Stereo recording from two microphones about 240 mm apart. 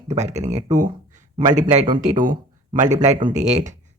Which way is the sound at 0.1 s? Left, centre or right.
Right.